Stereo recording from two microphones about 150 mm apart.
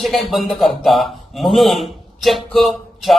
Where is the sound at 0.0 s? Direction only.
Centre (ahead or behind).